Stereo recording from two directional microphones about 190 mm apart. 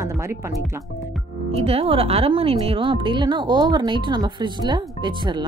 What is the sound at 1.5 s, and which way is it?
Speech, 30° right (ahead or behind).